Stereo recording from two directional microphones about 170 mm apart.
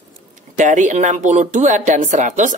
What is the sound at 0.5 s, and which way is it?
Speech, 45° right (ahead or behind).